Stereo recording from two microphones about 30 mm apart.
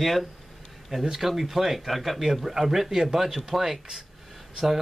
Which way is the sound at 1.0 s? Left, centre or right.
Centre.